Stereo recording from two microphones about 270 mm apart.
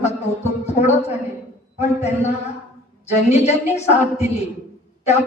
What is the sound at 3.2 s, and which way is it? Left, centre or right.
Speech, left.